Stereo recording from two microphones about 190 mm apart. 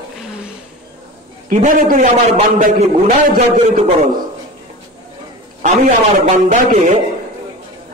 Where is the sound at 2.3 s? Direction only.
35° right (ahead or behind).